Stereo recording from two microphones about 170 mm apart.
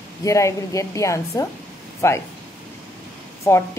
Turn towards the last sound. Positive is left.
turn(degrees=15)  # may be behind; listen again after turning